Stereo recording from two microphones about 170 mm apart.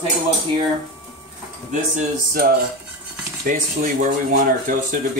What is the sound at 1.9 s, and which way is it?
Speech, 60° right (ahead or behind).